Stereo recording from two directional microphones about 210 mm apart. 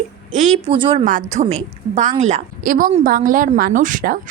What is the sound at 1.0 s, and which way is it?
A woman's voice, 40° right (ahead or behind).